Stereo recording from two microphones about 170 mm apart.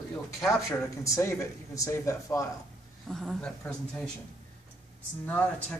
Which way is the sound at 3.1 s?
Centre (ahead or behind).